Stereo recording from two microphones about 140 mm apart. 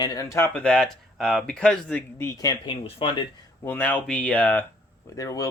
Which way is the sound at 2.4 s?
30° left (ahead or behind).